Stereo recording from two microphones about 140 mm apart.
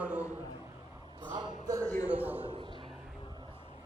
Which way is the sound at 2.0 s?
10° right (ahead or behind).